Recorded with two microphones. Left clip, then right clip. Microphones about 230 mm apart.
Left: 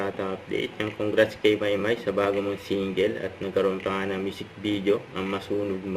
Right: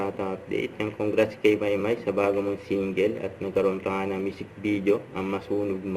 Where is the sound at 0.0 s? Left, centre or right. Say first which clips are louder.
Even; centre.